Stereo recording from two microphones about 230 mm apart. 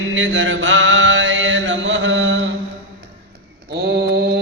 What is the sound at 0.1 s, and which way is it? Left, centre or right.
Mantra, right.